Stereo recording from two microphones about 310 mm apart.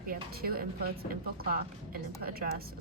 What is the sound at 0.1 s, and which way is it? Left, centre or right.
Speech, right.